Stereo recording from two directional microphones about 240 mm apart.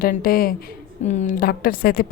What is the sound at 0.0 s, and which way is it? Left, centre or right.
A woman's voice, left.